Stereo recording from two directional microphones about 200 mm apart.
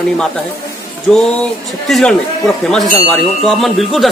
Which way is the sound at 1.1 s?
5° left (ahead or behind).